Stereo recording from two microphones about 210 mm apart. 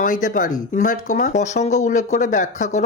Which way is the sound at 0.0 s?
40° left (ahead or behind).